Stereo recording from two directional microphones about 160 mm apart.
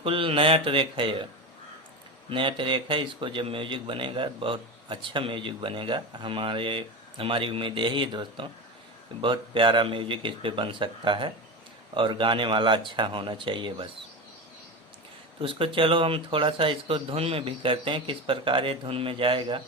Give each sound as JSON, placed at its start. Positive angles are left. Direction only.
{"t": 0.0, "sound": "speech", "side_deg": -35}
{"t": 2.3, "sound": "speech", "side_deg": -30}
{"t": 15.4, "sound": "speech", "side_deg": -35}